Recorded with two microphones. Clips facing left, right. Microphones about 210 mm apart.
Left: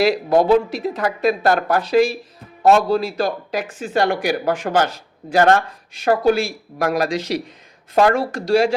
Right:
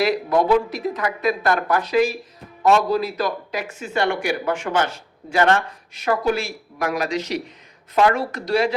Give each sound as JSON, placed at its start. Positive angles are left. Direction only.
{"t": 0.0, "sound": "a man's voice", "side_deg": 30}